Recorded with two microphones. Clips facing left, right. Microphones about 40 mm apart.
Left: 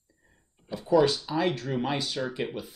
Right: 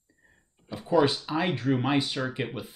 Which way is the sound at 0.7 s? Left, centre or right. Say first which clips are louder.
Left 1 dB; centre.